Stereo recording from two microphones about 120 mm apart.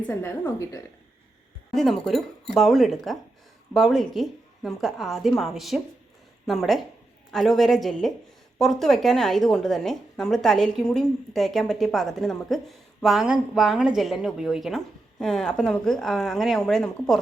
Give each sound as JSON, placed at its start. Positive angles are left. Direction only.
{"t": 0.1, "sound": "a woman's voice", "side_deg": 20}
{"t": 1.7, "sound": "a woman's voice", "side_deg": 5}